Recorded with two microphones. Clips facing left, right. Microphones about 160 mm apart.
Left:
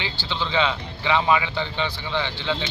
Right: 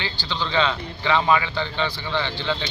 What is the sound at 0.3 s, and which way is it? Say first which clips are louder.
Speech: right 1 dB; 10° left (ahead or behind).